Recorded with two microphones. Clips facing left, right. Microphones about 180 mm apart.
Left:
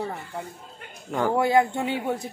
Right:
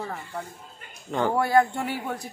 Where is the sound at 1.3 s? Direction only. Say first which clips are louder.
Left 1 dB; 20° left (ahead or behind).